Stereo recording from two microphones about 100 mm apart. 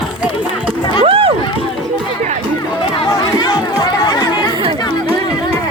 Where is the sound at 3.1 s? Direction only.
45° left (ahead or behind).